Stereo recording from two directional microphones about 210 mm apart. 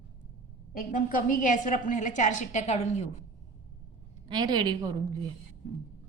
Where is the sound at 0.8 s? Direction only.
40° left (ahead or behind).